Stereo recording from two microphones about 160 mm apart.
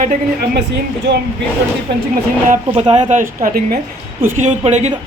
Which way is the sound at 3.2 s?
60° right (ahead or behind).